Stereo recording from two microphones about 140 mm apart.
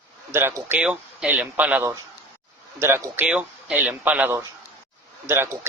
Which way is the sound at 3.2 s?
5° right (ahead or behind).